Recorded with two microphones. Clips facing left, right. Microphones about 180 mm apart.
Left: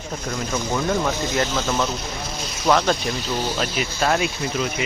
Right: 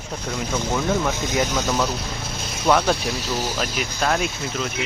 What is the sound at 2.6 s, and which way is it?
Speech, 5° right (ahead or behind).